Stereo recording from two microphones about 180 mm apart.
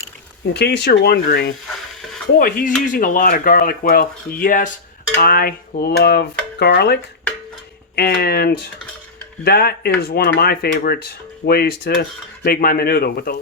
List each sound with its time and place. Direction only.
0.5 s speech: 65° left (ahead or behind)
2.4 s speech: 50° left (ahead or behind)